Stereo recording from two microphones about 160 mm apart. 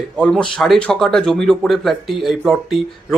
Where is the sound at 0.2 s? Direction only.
5° left (ahead or behind).